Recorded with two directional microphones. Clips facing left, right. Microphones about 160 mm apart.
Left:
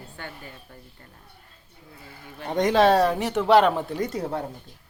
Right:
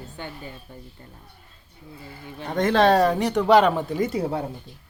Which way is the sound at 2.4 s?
15° left (ahead or behind).